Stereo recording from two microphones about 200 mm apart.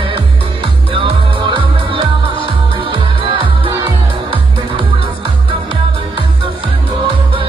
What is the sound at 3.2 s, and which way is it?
Music, 25° right (ahead or behind).